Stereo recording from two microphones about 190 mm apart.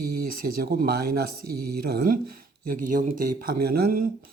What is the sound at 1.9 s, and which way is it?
Speech, 50° right (ahead or behind).